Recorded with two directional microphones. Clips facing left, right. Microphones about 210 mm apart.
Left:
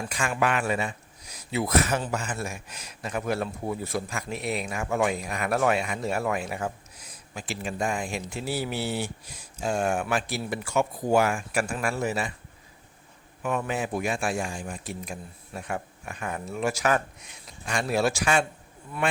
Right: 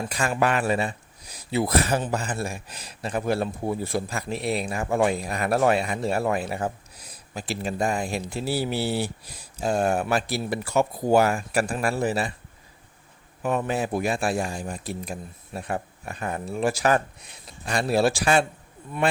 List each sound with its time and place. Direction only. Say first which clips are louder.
0.1 s speech: right 2 dB; 35° right (ahead or behind)
13.4 s speech: right 3 dB; 35° right (ahead or behind)